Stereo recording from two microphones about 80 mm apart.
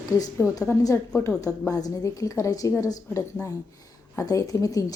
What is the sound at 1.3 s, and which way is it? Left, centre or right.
A woman's voice, left.